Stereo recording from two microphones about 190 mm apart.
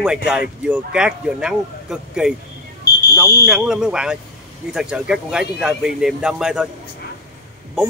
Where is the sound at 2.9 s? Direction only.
55° left (ahead or behind).